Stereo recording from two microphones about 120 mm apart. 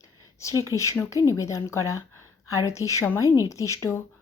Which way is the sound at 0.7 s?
25° left (ahead or behind).